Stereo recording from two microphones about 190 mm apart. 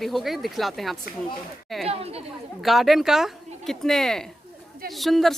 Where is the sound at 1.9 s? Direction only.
30° right (ahead or behind).